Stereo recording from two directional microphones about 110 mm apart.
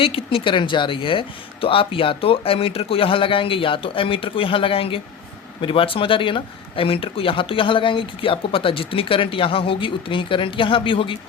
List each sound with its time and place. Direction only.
0.0 s speech: 55° left (ahead or behind)